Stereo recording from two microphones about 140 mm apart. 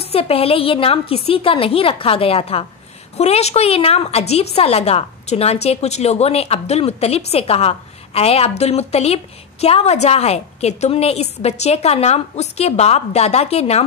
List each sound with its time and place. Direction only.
0.1 s a woman's voice: 45° left (ahead or behind)